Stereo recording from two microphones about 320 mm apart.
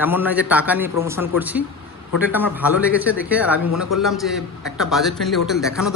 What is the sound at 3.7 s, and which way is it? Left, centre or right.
Speech, left.